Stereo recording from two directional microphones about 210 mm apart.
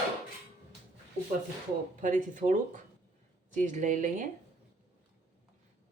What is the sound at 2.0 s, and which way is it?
Speech, 40° right (ahead or behind).